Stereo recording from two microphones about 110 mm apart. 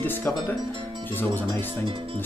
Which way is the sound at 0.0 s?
20° left (ahead or behind).